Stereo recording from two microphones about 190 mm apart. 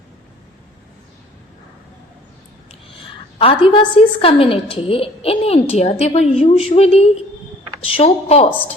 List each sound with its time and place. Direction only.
3.3 s a woman's voice: 25° left (ahead or behind)